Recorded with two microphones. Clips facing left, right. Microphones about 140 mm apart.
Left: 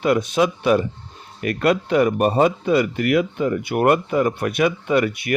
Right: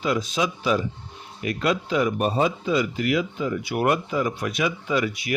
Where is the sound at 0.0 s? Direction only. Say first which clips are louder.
Left 6 dB; 60° left (ahead or behind).